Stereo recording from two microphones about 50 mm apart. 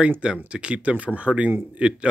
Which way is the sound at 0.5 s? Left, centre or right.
Right.